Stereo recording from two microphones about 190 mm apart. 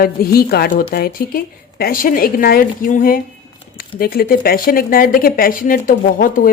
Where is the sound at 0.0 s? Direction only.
50° left (ahead or behind).